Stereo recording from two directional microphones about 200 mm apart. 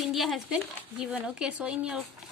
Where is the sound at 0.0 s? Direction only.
Centre (ahead or behind).